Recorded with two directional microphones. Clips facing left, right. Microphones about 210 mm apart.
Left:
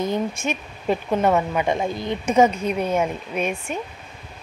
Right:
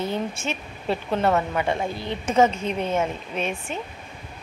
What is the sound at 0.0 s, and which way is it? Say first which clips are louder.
A woman's voice: left 3 dB; 15° left (ahead or behind).